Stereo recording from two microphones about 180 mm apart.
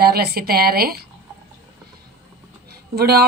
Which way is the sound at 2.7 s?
60° right (ahead or behind).